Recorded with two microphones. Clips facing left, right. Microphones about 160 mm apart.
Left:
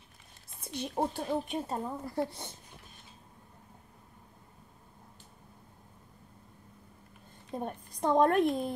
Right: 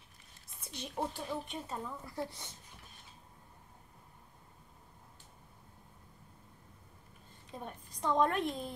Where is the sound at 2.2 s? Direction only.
60° left (ahead or behind).